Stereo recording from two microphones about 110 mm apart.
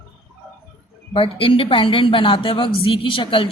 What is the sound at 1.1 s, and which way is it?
A woman's voice, 55° left (ahead or behind).